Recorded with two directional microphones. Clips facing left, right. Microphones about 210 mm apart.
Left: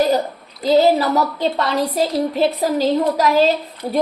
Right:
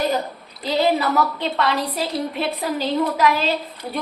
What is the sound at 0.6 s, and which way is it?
A woman's voice, 40° left (ahead or behind).